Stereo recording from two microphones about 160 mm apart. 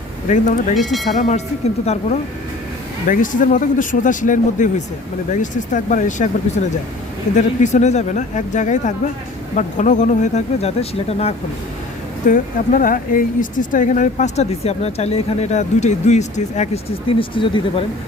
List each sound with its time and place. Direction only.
0.3 s speech: 50° left (ahead or behind)
0.9 s speech: centre (ahead or behind)
1.1 s speech: 50° left (ahead or behind)
3.1 s speech: 55° left (ahead or behind)
7.3 s speech: 50° left (ahead or behind)
12.3 s speech: 55° left (ahead or behind); by 17.8 s 30° left (ahead or behind)